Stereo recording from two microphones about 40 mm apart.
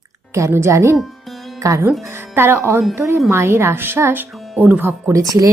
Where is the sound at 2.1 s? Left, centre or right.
Right.